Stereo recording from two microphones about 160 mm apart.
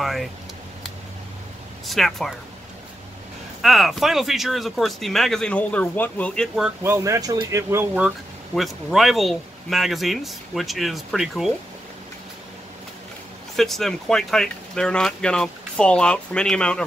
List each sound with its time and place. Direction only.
0.0 s speech: centre (ahead or behind)
1.9 s speech: centre (ahead or behind)
3.6 s speech: centre (ahead or behind)
6.8 s speech: 15° right (ahead or behind)
8.5 s speech: centre (ahead or behind)
13.6 s speech: centre (ahead or behind)